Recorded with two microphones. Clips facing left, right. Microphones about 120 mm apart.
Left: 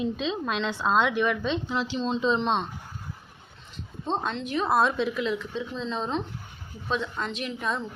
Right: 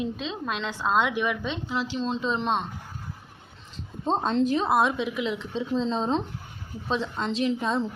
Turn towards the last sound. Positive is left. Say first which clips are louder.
# right 5 dB
turn(degrees=-25)  # may be behind; listen again after turning